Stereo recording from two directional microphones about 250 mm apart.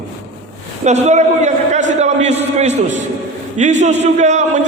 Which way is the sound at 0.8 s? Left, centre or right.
Right.